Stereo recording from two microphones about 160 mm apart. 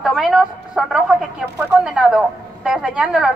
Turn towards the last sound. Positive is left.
turn(degrees=-5)  # may be behind; listen again after turning